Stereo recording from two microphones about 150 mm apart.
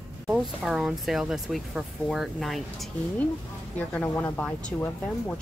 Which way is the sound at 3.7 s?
15° left (ahead or behind).